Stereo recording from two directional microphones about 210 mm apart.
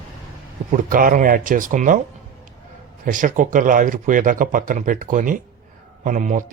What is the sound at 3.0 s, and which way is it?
Speech, 40° right (ahead or behind).